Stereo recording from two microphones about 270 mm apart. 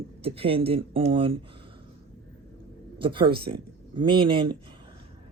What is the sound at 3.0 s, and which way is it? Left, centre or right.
Speech, centre.